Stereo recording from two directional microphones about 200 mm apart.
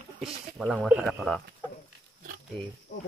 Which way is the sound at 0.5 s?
Centre (ahead or behind).